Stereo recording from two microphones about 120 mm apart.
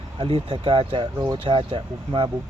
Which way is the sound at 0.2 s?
45° right (ahead or behind).